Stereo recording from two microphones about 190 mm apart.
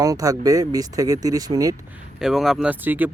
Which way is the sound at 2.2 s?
Centre (ahead or behind).